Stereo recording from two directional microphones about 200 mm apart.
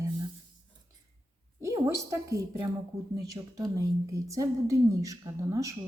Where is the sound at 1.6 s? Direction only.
15° right (ahead or behind).